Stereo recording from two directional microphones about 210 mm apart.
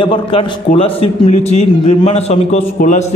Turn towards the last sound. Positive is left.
turn(degrees=35)  # may be behind; listen again after turning